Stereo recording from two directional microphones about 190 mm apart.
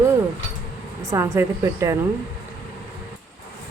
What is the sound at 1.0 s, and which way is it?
Speech, 15° right (ahead or behind).